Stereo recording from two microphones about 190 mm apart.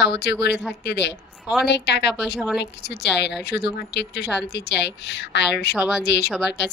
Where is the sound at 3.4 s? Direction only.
60° left (ahead or behind).